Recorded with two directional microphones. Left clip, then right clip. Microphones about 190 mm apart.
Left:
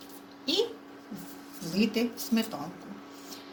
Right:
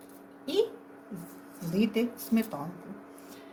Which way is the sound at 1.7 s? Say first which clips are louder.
Even; 60° right (ahead or behind).